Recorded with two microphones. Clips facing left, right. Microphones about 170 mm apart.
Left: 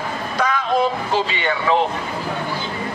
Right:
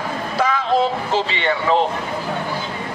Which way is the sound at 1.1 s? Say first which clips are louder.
Right 1 dB; centre (ahead or behind).